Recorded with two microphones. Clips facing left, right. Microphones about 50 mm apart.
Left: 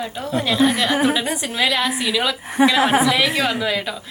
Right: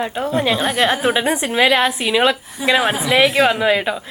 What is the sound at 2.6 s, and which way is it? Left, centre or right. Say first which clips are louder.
Speech: left 4 dB; left.